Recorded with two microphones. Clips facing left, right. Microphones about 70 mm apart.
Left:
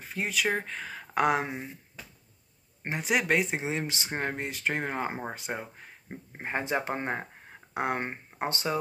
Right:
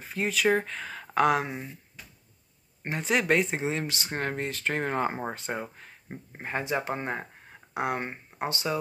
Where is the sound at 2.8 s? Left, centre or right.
Centre.